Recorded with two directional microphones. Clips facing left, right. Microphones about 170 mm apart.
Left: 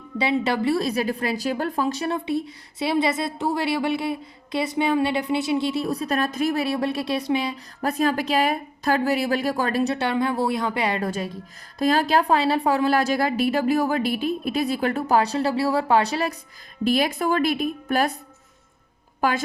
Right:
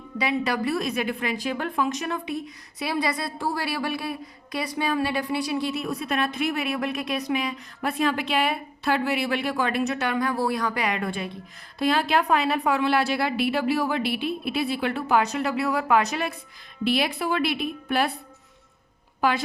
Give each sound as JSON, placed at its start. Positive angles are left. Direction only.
{"t": 0.2, "sound": "a woman's voice", "side_deg": 25}
{"t": 16.8, "sound": "a woman's voice", "side_deg": 45}
{"t": 19.2, "sound": "a woman's voice", "side_deg": 45}